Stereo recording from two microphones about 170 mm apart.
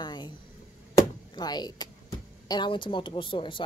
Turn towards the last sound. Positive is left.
turn(degrees=30)  # may be behind; listen again after turning